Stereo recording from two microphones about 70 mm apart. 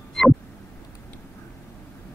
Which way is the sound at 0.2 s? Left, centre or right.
Centre.